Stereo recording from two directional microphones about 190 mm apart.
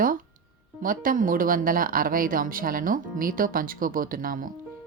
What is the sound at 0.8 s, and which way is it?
Speech, 45° right (ahead or behind).